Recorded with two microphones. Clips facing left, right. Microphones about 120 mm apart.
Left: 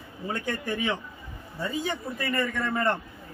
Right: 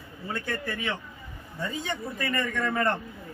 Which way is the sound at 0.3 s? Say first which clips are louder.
Left 2 dB; 15° left (ahead or behind).